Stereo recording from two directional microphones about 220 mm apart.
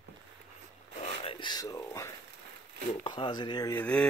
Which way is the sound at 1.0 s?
25° left (ahead or behind).